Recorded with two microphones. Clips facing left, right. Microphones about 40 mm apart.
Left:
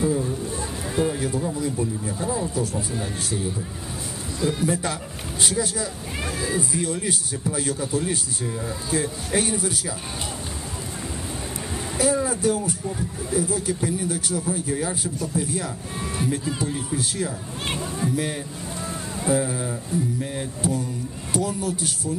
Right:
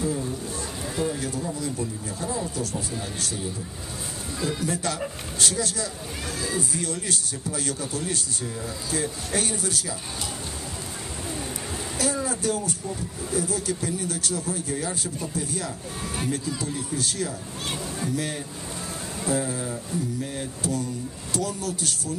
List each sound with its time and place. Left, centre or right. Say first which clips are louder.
0.9 s speech: left 5 dB; centre
12.0 s speech: left 6 dB; centre